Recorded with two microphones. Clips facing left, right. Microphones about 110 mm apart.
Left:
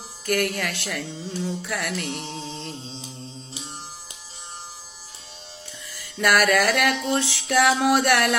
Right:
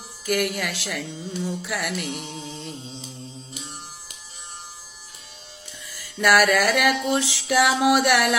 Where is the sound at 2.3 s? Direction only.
25° left (ahead or behind).